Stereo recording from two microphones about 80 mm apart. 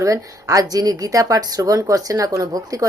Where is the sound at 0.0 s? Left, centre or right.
Right.